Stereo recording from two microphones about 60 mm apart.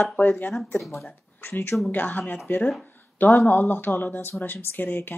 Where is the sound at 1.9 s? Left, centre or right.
Left.